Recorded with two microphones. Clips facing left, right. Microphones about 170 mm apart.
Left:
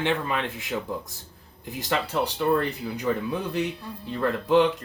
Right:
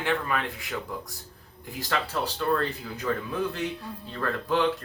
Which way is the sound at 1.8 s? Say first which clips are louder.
Left 3 dB; 20° left (ahead or behind).